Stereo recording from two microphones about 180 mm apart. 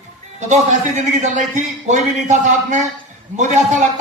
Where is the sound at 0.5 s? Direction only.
40° right (ahead or behind).